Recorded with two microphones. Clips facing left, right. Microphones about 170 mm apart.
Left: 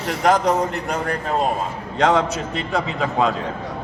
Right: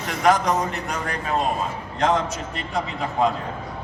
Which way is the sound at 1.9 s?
70° left (ahead or behind).